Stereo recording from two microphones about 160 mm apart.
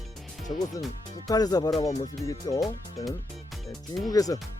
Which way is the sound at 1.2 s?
25° left (ahead or behind).